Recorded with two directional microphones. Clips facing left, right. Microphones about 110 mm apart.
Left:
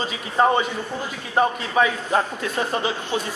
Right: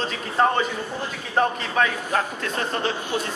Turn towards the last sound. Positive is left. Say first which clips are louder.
# left 1 dB
turn(degrees=10)  # may be behind; listen again after turning